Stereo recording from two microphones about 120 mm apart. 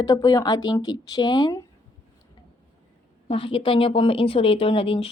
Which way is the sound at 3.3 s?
50° left (ahead or behind).